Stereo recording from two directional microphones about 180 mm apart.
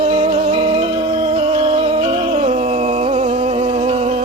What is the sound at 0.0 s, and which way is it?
Music, 35° right (ahead or behind).